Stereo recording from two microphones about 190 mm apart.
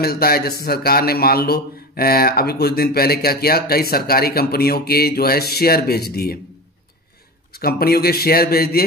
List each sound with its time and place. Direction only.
0.0 s a man's voice: 55° left (ahead or behind)
7.5 s speech: 55° left (ahead or behind)